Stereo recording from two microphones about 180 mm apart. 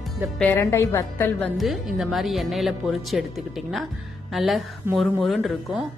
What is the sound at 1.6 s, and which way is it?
Speech, centre (ahead or behind).